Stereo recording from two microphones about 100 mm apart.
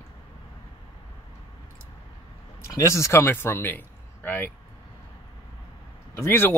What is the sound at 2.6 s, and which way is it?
Speech, 30° left (ahead or behind).